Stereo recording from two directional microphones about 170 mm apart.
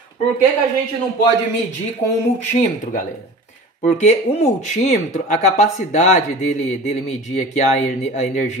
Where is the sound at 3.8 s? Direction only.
40° left (ahead or behind).